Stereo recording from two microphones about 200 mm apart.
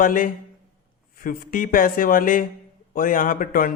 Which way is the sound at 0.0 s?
40° left (ahead or behind).